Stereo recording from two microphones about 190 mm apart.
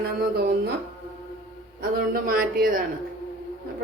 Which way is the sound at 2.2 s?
50° right (ahead or behind).